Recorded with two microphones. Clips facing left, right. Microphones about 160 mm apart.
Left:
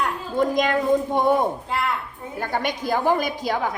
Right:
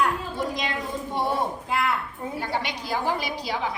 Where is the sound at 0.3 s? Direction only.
50° left (ahead or behind).